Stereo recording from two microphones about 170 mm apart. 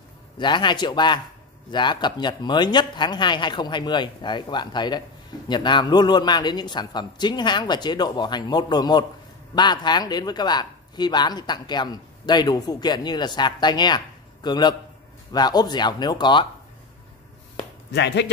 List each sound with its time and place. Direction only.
0.4 s speech: 25° left (ahead or behind)
17.9 s speech: 90° left